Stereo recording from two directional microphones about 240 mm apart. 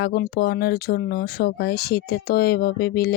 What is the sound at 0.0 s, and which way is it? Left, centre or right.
Speech, left.